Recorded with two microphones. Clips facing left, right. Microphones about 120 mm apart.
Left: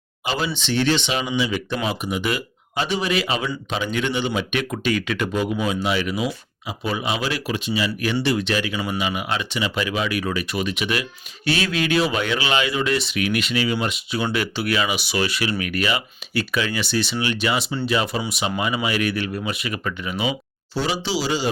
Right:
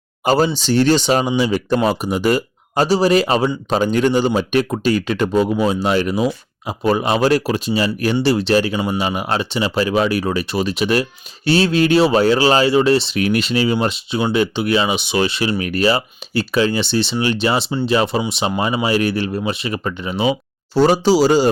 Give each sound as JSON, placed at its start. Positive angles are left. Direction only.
{"t": 0.3, "sound": "speech", "side_deg": -40}
{"t": 20.7, "sound": "speech", "side_deg": -45}